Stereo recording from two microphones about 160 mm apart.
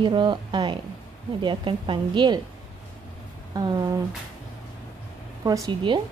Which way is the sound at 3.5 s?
25° right (ahead or behind).